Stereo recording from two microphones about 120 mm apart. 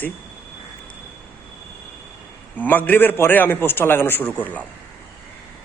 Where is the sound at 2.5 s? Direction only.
15° left (ahead or behind).